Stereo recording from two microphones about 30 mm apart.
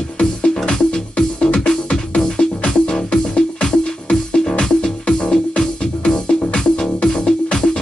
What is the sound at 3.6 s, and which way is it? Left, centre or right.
Music, left.